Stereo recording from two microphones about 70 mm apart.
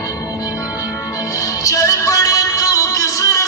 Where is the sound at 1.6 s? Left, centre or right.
Left.